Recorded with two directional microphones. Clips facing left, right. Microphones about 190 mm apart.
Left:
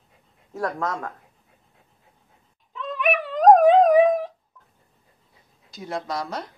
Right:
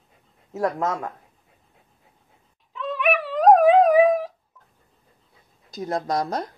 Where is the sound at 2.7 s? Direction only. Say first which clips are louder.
Right 1 dB; centre (ahead or behind).